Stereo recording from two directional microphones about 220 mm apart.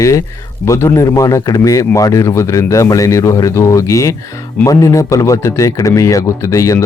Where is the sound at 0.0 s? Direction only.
15° left (ahead or behind).